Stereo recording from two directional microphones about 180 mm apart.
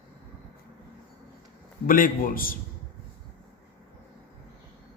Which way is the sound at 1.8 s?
50° left (ahead or behind).